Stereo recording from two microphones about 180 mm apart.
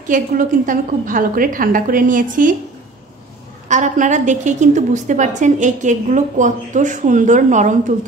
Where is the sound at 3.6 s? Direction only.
40° right (ahead or behind).